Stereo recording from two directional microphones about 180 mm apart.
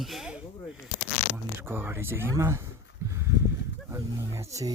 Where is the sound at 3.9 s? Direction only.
15° right (ahead or behind).